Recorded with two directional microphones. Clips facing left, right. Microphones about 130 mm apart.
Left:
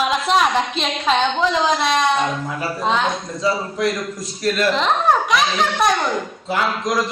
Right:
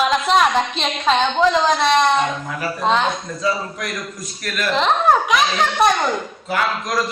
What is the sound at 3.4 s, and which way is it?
A man's voice, 25° left (ahead or behind).